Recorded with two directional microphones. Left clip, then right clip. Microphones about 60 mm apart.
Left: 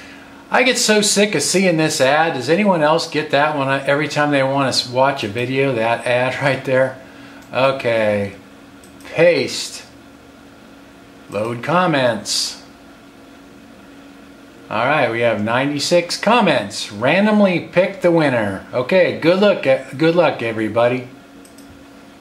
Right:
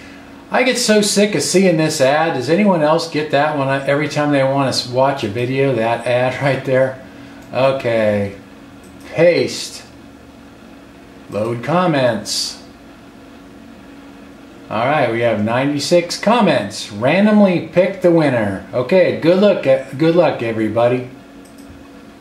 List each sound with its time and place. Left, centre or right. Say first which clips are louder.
0.5 s speech: even; centre
11.3 s speech: even; left
14.7 s speech: right 1 dB; centre